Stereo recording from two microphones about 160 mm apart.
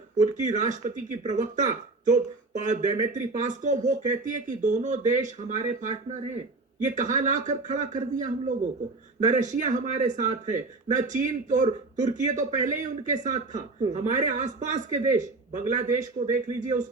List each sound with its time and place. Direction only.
0.2 s speech: 50° right (ahead or behind)